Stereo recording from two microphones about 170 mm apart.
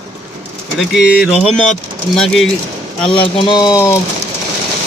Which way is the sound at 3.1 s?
30° left (ahead or behind).